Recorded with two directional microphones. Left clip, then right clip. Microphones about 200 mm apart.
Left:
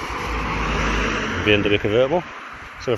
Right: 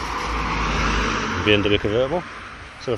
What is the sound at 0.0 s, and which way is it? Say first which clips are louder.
Vehicle: right 1 dB; 10° left (ahead or behind).